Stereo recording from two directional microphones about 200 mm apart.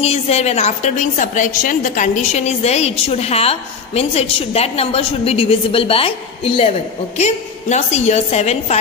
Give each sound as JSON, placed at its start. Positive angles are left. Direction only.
{"t": 0.0, "sound": "a woman's voice", "side_deg": 30}